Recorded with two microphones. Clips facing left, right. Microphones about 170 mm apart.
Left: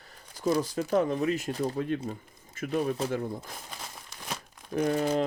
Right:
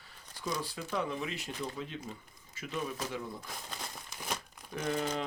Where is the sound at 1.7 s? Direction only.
55° left (ahead or behind).